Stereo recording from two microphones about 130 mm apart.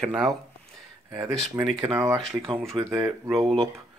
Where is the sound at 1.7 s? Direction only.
40° right (ahead or behind).